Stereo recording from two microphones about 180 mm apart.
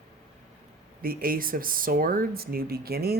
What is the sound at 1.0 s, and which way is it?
Speech, 55° right (ahead or behind).